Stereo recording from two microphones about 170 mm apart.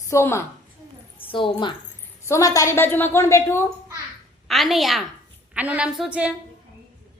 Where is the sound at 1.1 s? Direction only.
30° left (ahead or behind).